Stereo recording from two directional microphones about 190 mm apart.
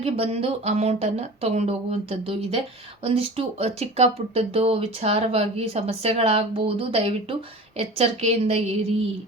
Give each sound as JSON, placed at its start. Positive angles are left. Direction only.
{"t": 0.0, "sound": "speech", "side_deg": -30}